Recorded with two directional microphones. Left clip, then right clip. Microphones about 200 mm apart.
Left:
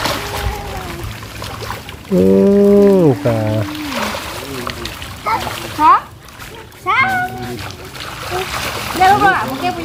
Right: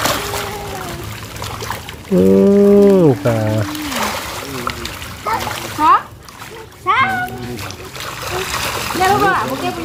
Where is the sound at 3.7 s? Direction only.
20° right (ahead or behind).